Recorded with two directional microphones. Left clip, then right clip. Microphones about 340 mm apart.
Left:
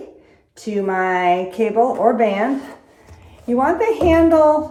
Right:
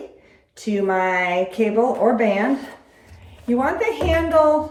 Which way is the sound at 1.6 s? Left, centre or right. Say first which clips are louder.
Left 1 dB; centre.